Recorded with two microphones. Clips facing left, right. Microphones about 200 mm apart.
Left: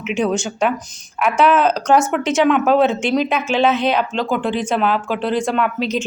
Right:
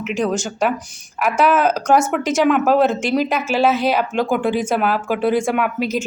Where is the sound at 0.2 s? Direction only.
Centre (ahead or behind).